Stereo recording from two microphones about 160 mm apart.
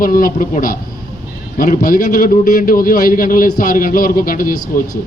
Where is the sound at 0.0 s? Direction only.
60° left (ahead or behind).